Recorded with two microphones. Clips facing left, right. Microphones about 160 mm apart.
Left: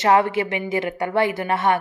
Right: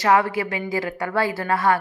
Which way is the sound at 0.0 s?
25° left (ahead or behind).